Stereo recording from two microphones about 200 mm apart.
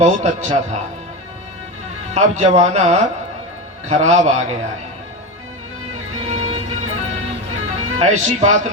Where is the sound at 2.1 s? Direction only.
35° right (ahead or behind).